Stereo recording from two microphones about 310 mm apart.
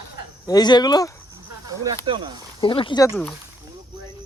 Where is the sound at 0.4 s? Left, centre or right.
Centre.